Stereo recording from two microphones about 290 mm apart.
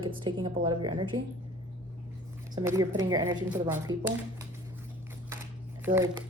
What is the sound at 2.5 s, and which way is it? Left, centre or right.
A woman's voice, centre.